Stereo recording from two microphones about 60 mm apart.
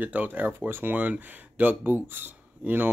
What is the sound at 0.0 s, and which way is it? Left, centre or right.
Speech, right.